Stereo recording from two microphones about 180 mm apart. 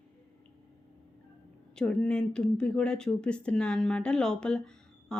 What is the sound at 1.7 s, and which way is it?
Speech, 5° left (ahead or behind).